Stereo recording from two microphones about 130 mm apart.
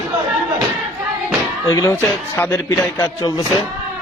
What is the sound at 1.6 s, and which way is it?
A man's voice, 25° left (ahead or behind).